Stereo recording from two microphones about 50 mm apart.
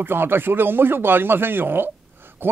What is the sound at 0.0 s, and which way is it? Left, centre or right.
Speech, right.